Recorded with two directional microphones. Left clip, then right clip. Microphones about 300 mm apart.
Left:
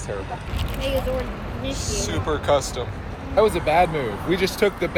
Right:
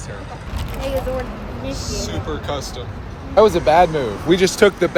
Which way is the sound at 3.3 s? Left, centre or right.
Right.